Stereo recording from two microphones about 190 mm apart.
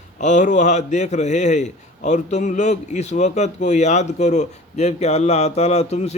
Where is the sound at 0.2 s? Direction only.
40° left (ahead or behind).